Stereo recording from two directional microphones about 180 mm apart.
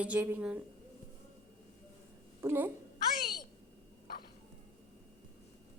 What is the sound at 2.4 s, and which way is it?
Speech, 15° right (ahead or behind).